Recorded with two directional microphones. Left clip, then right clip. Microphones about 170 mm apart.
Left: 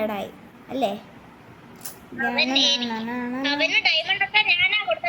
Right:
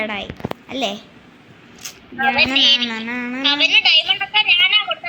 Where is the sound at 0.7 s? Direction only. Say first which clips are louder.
Right 1 dB; 5° left (ahead or behind).